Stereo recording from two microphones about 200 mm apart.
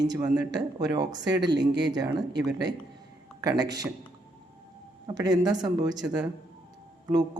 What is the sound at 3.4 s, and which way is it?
Speech, 20° right (ahead or behind).